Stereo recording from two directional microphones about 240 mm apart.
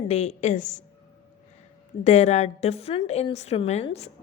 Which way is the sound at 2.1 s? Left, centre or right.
Left.